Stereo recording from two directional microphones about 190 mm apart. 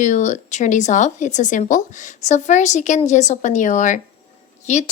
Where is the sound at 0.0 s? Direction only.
40° left (ahead or behind).